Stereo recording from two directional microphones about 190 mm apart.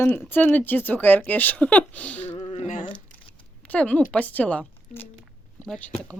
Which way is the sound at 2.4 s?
40° left (ahead or behind).